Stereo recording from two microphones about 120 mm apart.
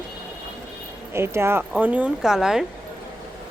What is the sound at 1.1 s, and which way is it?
A woman's voice, 20° right (ahead or behind).